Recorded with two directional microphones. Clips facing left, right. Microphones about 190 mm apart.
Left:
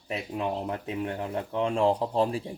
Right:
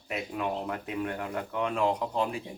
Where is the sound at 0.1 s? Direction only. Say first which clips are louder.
Left 1 dB; 25° left (ahead or behind).